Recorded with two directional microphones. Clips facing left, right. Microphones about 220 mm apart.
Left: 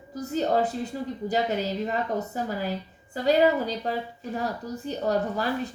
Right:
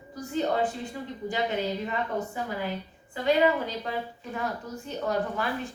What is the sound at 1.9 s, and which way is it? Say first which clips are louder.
Speech: left 2 dB; 40° left (ahead or behind).